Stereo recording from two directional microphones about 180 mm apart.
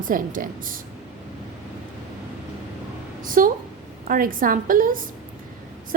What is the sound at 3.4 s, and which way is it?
A woman's voice, 50° right (ahead or behind).